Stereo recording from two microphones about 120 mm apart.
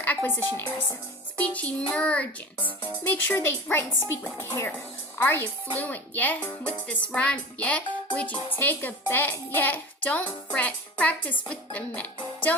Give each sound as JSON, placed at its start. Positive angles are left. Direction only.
{"t": 0.0, "sound": "a child's voice", "side_deg": 15}